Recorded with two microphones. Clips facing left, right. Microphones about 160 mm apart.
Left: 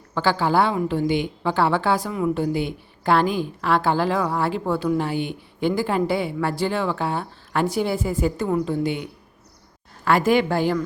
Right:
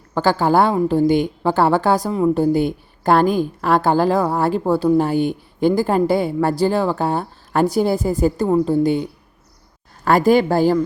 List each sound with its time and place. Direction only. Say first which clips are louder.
0.1 s a woman's voice: right 4 dB; 45° right (ahead or behind)